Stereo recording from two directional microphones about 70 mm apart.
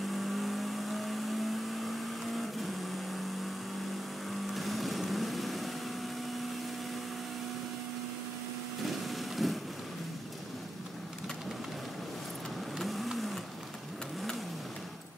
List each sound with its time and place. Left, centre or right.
0.1 s vehicle: centre
4.3 s vehicle: centre
8.8 s a sound: centre
12.7 s vehicle: centre